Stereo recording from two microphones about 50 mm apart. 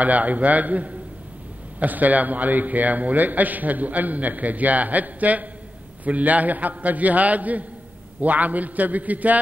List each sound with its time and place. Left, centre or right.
0.0 s a man's voice: right